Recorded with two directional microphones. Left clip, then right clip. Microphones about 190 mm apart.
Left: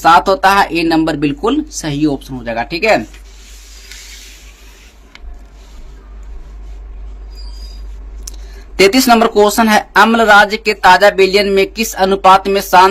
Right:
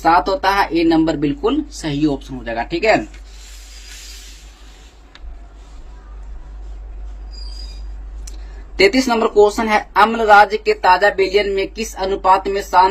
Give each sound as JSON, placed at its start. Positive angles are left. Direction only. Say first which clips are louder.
{"t": 0.0, "sound": "speech", "louder": "left 6 dB", "side_deg": 40}
{"t": 8.8, "sound": "speech", "louder": "left 5 dB", "side_deg": 45}